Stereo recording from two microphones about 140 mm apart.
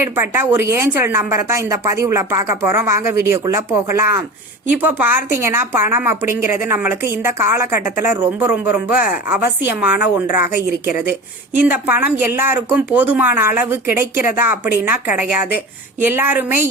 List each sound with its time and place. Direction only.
0.0 s a woman's voice: 15° right (ahead or behind)